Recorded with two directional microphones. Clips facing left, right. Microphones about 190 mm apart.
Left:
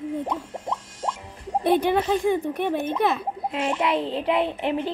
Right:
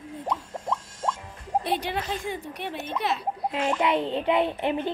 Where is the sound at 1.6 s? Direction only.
50° left (ahead or behind).